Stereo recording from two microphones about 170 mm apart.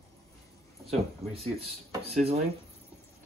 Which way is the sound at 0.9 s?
35° right (ahead or behind).